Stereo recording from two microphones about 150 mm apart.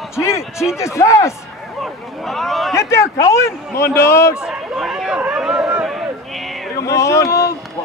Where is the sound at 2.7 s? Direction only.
20° left (ahead or behind).